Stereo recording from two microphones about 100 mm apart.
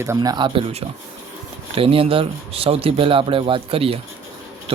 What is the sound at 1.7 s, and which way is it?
Speech, 65° right (ahead or behind).